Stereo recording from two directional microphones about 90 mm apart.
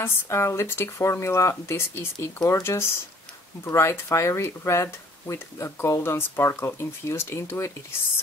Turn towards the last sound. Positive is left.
turn(degrees=30)  # may be behind; listen again after turning